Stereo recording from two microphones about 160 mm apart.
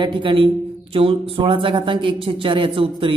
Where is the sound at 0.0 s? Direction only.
30° right (ahead or behind).